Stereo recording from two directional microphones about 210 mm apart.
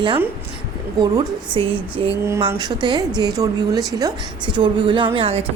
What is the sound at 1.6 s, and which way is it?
Speech, 25° right (ahead or behind).